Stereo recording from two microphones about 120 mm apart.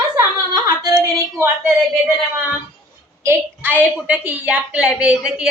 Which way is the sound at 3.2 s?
20° right (ahead or behind).